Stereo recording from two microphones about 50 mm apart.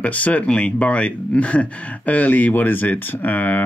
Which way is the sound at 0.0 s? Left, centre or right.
Left.